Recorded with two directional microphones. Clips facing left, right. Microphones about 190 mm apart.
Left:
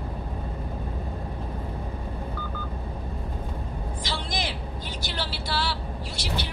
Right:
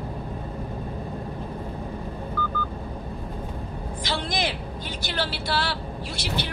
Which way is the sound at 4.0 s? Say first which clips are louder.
Right 5 dB; 60° right (ahead or behind).